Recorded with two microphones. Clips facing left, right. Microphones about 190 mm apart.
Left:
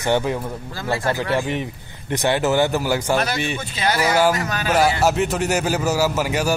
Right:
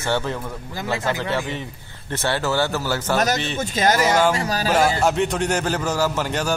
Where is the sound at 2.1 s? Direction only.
15° left (ahead or behind).